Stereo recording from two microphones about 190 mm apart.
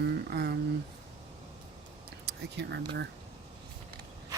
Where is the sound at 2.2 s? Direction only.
60° right (ahead or behind).